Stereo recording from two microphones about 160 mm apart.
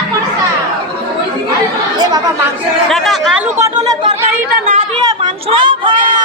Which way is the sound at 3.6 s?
20° right (ahead or behind).